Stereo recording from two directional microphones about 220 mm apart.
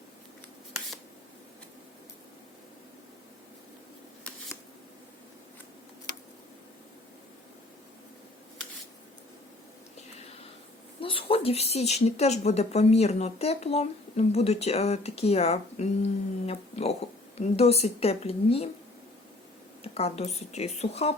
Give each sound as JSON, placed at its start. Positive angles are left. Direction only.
{"t": 11.0, "sound": "speech", "side_deg": 25}
{"t": 19.8, "sound": "speech", "side_deg": 25}